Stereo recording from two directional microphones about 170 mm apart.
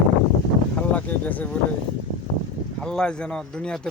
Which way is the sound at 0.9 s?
10° left (ahead or behind).